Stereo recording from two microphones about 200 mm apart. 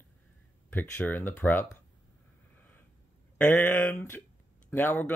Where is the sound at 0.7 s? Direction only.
10° left (ahead or behind).